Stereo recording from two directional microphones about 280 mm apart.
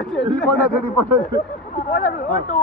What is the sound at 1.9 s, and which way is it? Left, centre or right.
Speech, left.